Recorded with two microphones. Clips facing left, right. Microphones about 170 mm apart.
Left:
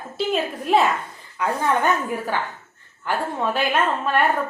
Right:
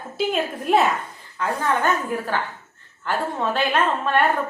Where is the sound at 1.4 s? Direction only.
15° left (ahead or behind).